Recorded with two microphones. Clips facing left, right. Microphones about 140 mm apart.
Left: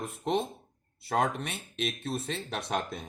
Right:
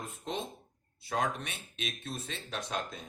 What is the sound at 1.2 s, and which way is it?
Speech, 30° left (ahead or behind).